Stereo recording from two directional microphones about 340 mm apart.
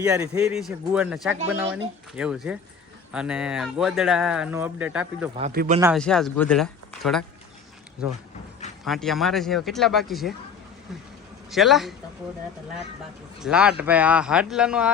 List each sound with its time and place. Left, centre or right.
0.0 s speech: centre
5.4 s speech: right
5.8 s speech: centre
8.8 s speech: centre
11.5 s speech: centre
13.4 s speech: centre